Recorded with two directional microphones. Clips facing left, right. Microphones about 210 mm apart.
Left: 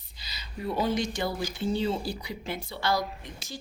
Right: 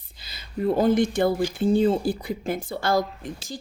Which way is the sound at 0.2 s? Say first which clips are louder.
Right 10 dB; 50° right (ahead or behind).